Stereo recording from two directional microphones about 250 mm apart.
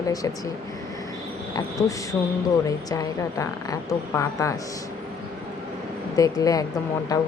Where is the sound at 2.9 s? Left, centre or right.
Centre.